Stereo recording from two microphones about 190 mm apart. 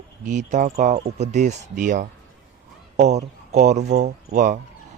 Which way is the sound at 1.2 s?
40° right (ahead or behind).